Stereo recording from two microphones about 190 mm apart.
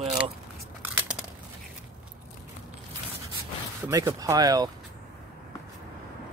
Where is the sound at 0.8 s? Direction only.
5° right (ahead or behind).